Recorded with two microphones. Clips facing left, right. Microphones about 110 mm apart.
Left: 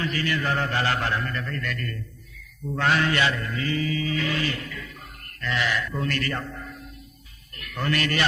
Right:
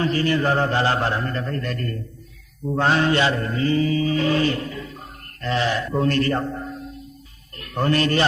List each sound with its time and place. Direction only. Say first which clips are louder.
0.0 s chant: right 7 dB; 35° right (ahead or behind)
5.4 s a man's voice: right 4 dB; 30° right (ahead or behind)